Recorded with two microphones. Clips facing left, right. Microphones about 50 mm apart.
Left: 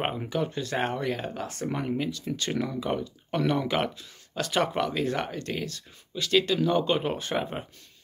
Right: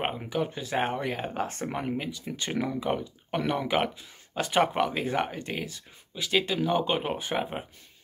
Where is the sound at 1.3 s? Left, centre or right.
Right.